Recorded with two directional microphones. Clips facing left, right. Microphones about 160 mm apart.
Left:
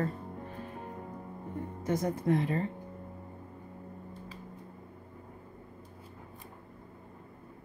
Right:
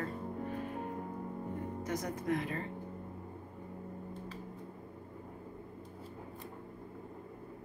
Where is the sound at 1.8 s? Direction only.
30° left (ahead or behind).